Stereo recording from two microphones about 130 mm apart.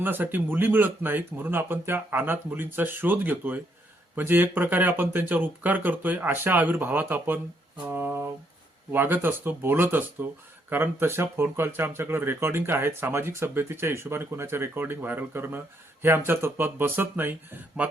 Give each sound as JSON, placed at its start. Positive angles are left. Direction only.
{"t": 0.0, "sound": "speech", "side_deg": -15}